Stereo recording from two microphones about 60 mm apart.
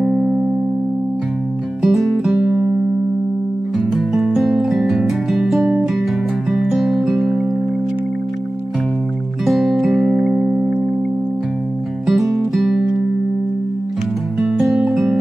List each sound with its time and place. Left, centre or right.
0.0 s music: centre
1.8 s music: centre
2.4 s music: centre
3.7 s music: centre
9.4 s music: centre
12.1 s music: centre
14.4 s guitar: centre